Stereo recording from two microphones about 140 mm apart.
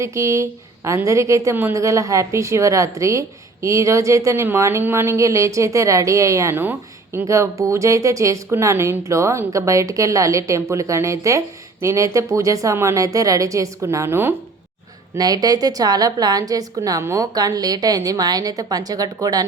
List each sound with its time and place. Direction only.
0.0 s a woman's voice: 20° right (ahead or behind)
15.1 s a woman's voice: 25° right (ahead or behind)